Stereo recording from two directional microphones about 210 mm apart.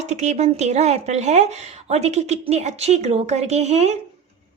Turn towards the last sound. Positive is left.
turn(degrees=-30)  # may be behind; listen again after turning